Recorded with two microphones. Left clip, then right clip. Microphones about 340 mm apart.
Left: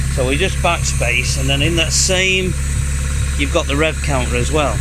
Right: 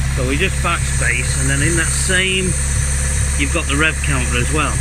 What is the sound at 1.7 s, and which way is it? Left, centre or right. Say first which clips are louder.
Speech: left 2 dB; centre.